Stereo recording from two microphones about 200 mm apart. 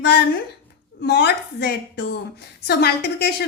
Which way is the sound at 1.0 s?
55° left (ahead or behind).